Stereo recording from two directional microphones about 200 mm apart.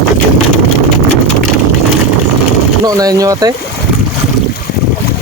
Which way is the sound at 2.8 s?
20° right (ahead or behind).